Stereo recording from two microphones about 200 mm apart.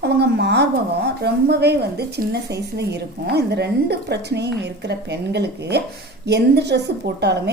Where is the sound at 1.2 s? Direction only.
55° right (ahead or behind).